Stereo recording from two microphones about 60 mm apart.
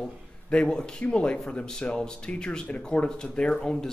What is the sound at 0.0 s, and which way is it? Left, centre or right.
A man's voice, centre.